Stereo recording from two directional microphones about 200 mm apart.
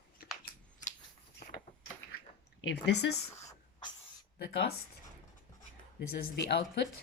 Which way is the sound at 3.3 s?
35° left (ahead or behind).